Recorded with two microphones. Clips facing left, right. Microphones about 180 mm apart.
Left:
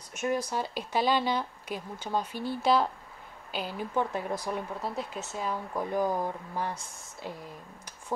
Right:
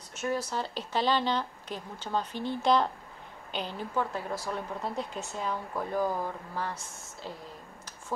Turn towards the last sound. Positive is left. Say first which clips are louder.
# left 1 dB
turn(degrees=15)  # may be behind; listen again after turning